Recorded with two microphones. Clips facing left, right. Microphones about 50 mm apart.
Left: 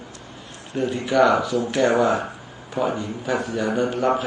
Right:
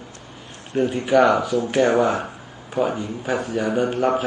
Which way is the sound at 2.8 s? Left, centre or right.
Centre.